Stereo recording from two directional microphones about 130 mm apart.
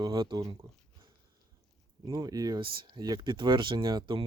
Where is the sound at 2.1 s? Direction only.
30° right (ahead or behind).